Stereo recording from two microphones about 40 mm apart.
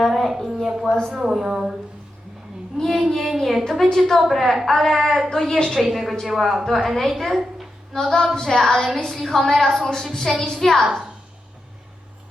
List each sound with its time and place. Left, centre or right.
0.0 s a sound: centre
0.7 s speech: centre
2.7 s child singing: centre
3.9 s a woman's voice: centre
5.7 s a woman's voice: centre
7.9 s a woman's voice: centre